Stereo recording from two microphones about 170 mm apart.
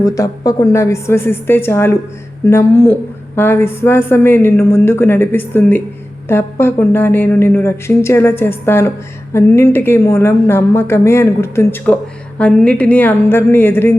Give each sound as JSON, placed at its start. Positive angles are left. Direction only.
{"t": 0.0, "sound": "a woman's voice", "side_deg": 20}